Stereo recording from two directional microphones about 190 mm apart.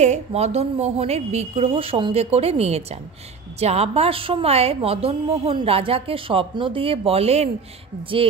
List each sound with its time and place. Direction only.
0.0 s a woman's voice: 35° right (ahead or behind)